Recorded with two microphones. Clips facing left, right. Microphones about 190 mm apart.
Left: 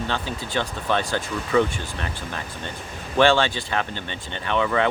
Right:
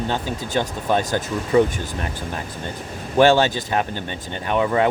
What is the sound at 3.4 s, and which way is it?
Speech, 40° right (ahead or behind).